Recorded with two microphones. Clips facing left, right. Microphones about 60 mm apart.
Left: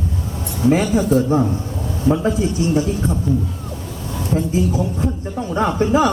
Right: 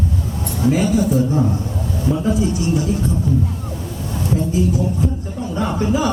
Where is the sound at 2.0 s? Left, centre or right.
Left.